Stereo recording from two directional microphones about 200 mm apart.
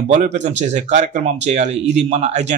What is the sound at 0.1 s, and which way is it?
Speech, 35° right (ahead or behind).